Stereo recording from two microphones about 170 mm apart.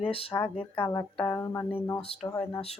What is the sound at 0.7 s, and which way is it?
Speech, 15° left (ahead or behind).